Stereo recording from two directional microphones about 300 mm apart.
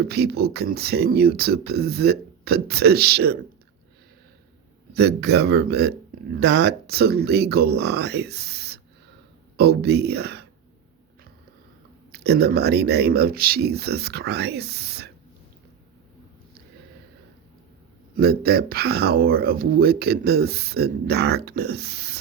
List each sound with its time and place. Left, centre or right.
0.0 s speech: right
4.9 s speech: right
12.1 s speech: right
18.2 s speech: right